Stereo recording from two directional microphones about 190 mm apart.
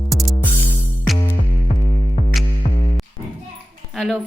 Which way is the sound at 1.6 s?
40° left (ahead or behind).